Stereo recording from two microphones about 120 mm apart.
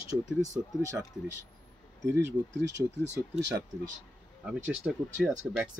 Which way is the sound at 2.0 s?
20° right (ahead or behind).